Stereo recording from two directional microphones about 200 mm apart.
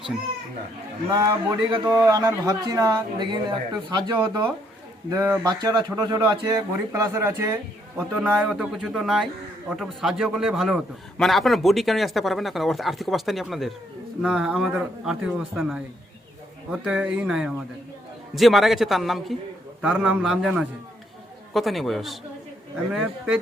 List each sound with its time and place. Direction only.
1.1 s a man's voice: 15° right (ahead or behind)
16.8 s speech: 5° right (ahead or behind)